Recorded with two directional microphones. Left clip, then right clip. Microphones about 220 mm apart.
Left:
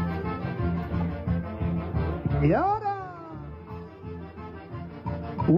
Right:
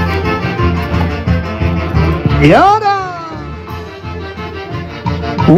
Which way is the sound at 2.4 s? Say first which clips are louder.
Right 17 dB; 65° right (ahead or behind).